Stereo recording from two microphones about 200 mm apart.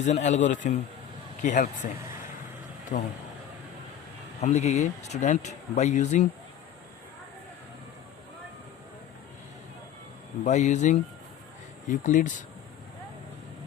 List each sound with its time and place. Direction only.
0.0 s speech: 35° left (ahead or behind)
2.9 s speech: 40° left (ahead or behind)
4.4 s speech: 35° left (ahead or behind)
10.4 s speech: 35° left (ahead or behind)